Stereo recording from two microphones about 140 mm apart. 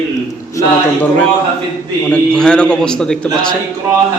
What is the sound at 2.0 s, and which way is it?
A man's voice, 5° left (ahead or behind).